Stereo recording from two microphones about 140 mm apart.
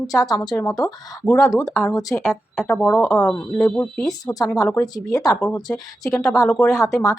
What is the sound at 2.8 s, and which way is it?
Speech, 15° left (ahead or behind).